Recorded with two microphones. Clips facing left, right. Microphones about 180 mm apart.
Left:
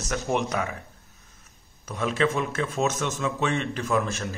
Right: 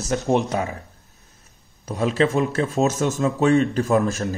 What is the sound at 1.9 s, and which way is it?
A man's voice, 35° right (ahead or behind).